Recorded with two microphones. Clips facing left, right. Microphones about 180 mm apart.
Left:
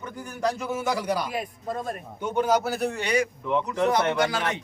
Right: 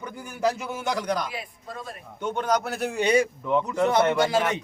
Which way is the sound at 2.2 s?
10° left (ahead or behind).